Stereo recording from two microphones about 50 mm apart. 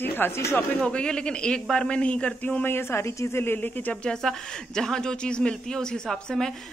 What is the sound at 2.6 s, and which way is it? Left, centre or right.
Speech, left.